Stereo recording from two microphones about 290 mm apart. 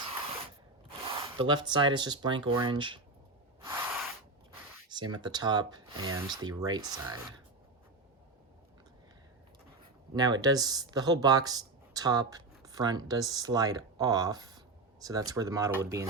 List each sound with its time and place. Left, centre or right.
1.1 s speech: centre
3.6 s a sound: centre
4.9 s speech: centre
10.2 s speech: centre